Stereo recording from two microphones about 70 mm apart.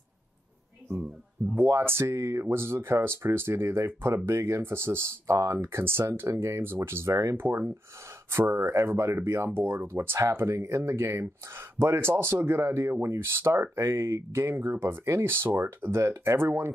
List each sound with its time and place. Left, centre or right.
0.9 s speech: right